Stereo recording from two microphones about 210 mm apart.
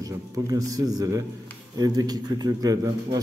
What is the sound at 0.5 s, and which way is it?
A man's voice, 15° right (ahead or behind).